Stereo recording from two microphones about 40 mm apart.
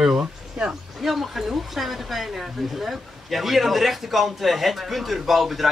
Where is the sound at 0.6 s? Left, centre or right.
Centre.